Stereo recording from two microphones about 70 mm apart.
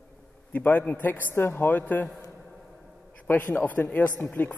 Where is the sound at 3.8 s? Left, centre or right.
Left.